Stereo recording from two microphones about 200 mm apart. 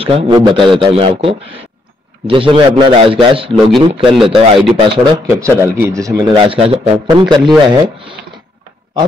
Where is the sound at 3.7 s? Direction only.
Centre (ahead or behind).